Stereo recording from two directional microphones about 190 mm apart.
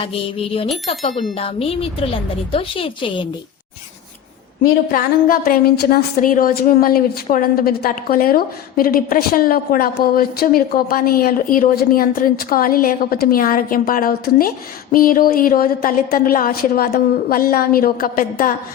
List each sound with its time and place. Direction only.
0.0 s a woman's voice: 30° left (ahead or behind)
4.9 s a woman's voice: 50° left (ahead or behind)